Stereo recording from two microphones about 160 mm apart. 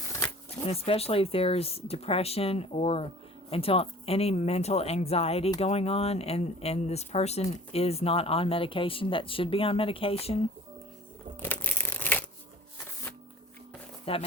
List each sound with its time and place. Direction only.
0.6 s speech: 40° left (ahead or behind)
11.3 s crushing: 10° left (ahead or behind)
14.0 s speech: 35° left (ahead or behind)